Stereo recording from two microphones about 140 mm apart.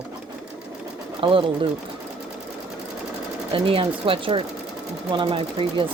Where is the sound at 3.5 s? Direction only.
40° right (ahead or behind).